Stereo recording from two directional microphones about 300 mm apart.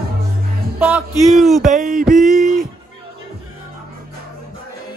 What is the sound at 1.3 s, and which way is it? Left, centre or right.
Music, centre.